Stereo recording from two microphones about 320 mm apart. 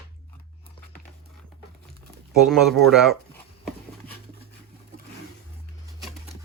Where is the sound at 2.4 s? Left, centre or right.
Centre.